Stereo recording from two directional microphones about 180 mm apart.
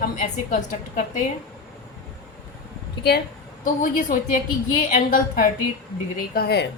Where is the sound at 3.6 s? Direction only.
45° left (ahead or behind); by 6.7 s 60° left (ahead or behind).